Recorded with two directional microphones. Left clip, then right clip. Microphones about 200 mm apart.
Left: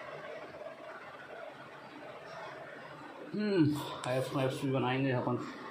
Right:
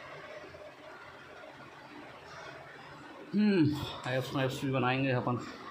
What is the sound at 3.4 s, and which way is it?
A man's voice, 30° right (ahead or behind).